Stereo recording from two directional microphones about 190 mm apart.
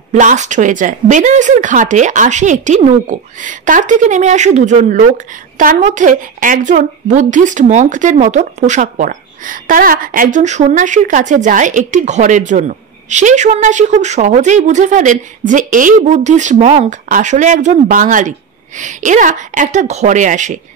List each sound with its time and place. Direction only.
0.1 s speech: 40° right (ahead or behind)